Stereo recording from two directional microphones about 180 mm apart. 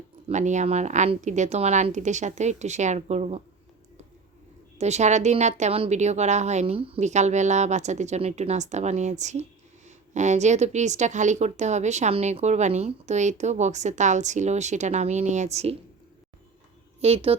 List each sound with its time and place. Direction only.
0.3 s a woman's voice: 40° right (ahead or behind)
4.8 s a woman's voice: 40° right (ahead or behind)
17.0 s a woman's voice: 35° right (ahead or behind)